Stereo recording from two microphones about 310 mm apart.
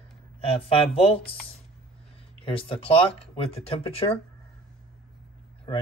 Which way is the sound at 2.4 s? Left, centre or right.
Centre.